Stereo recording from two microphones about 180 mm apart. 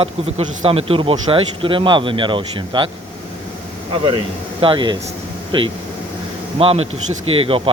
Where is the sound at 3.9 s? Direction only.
30° right (ahead or behind).